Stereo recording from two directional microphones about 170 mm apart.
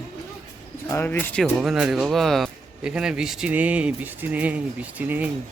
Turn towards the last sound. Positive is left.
turn(degrees=-10)  # may be behind; listen again after turning